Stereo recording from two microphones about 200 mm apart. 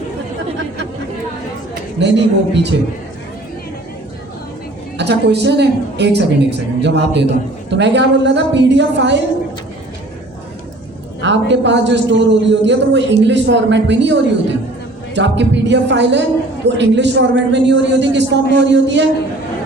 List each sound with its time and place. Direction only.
2.0 s a man's voice: 60° right (ahead or behind)
4.9 s a man's voice: 60° right (ahead or behind)
11.2 s a man's voice: 60° right (ahead or behind)